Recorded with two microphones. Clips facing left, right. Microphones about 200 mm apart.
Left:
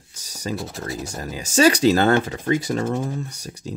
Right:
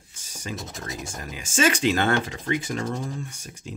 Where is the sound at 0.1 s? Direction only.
40° left (ahead or behind).